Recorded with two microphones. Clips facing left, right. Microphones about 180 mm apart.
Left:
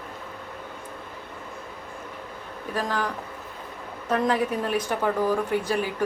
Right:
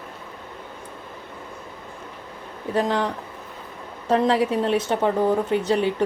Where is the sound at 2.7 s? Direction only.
25° right (ahead or behind).